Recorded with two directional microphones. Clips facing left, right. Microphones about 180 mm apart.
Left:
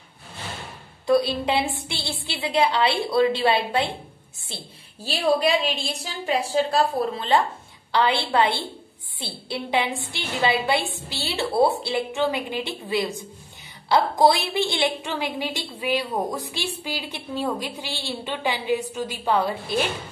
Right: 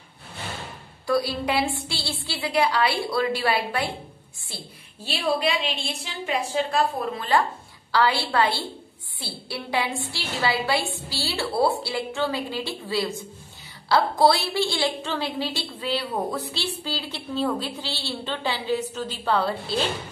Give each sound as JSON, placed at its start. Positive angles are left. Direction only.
{"t": 1.0, "sound": "a woman's voice", "side_deg": 20}
{"t": 5.0, "sound": "a woman's voice", "side_deg": 40}
{"t": 7.9, "sound": "a woman's voice", "side_deg": 20}